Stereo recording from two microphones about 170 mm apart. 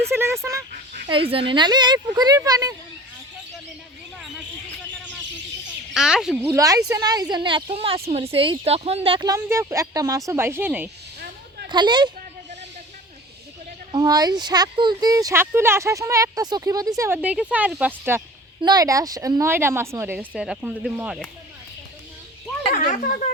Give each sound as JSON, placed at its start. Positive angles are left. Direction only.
{"t": 0.1, "sound": "speech", "side_deg": -15}
{"t": 1.0, "sound": "speech", "side_deg": -30}
{"t": 5.9, "sound": "speech", "side_deg": -5}
{"t": 6.4, "sound": "speech", "side_deg": -20}
{"t": 9.3, "sound": "speech", "side_deg": -15}
{"t": 11.7, "sound": "speech", "side_deg": -25}
{"t": 13.9, "sound": "speech", "side_deg": -25}
{"t": 17.2, "sound": "speech", "side_deg": -10}
{"t": 18.6, "sound": "speech", "side_deg": -20}
{"t": 22.7, "sound": "speech", "side_deg": 50}